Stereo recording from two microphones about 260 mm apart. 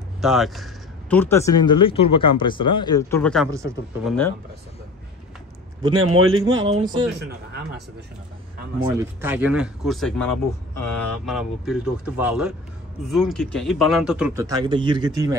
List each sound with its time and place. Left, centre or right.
0.2 s speech: centre
3.4 s speech: centre
4.0 s speech: centre
5.8 s a man's voice: centre
6.1 s speech: right
6.7 s speech: centre
7.2 s speech: right
8.8 s speech: centre